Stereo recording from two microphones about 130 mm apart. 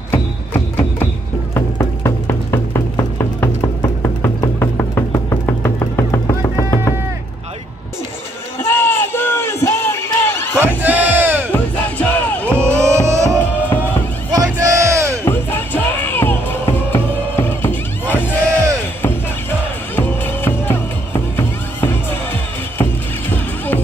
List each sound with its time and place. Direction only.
0.1 s music: 15° left (ahead or behind)
8.5 s a sound: 20° left (ahead or behind)
10.8 s crowd: 15° right (ahead or behind)
11.5 s music: 10° left (ahead or behind)
12.5 s music: 20° right (ahead or behind)
13.6 s music: 15° left (ahead or behind)
14.3 s music: 30° right (ahead or behind)
15.2 s music: 15° left (ahead or behind)
20.0 s music: 15° left (ahead or behind)